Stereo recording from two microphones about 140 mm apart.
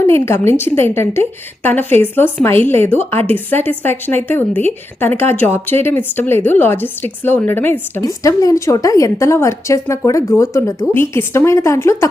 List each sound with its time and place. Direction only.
0.0 s a woman's voice: 15° left (ahead or behind)